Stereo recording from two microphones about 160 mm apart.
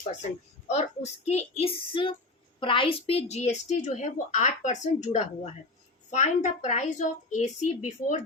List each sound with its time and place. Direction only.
0.7 s a woman's voice: 45° left (ahead or behind)